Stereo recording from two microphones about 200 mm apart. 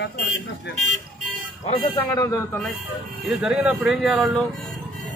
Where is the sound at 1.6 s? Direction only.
25° left (ahead or behind).